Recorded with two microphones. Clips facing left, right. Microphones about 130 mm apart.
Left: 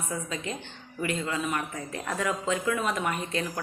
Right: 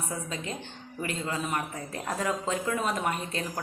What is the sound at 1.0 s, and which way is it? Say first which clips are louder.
Speech: left 3 dB; 35° right (ahead or behind).